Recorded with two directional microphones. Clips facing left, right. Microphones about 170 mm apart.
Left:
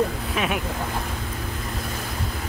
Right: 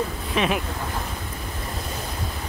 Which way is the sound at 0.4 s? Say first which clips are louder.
Right 3 dB; 5° left (ahead or behind).